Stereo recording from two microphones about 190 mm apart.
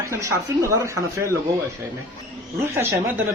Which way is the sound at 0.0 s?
15° right (ahead or behind).